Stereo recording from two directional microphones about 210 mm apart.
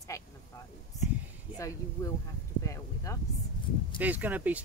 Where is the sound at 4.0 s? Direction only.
10° right (ahead or behind).